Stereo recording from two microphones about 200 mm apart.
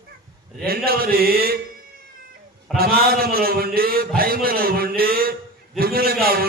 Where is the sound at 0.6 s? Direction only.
50° right (ahead or behind).